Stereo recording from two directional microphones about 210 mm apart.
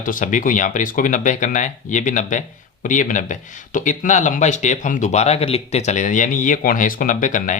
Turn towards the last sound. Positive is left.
turn(degrees=40)  # may be behind; listen again after turning